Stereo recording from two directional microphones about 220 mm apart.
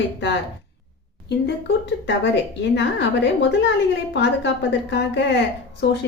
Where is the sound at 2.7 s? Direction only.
50° left (ahead or behind).